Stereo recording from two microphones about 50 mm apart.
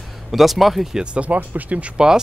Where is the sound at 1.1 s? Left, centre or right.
Right.